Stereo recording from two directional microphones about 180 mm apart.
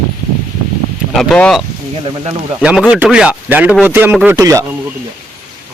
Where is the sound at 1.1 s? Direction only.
Centre (ahead or behind).